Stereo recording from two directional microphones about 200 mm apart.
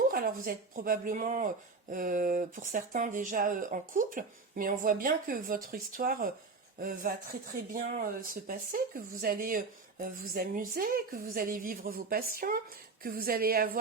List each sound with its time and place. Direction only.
0.1 s speech: 45° right (ahead or behind)